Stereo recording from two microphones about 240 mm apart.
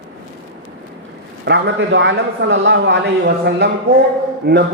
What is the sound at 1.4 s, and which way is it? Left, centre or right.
A man's voice, right.